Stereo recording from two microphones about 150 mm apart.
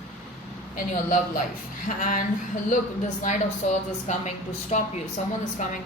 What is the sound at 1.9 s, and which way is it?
Speech, 60° left (ahead or behind).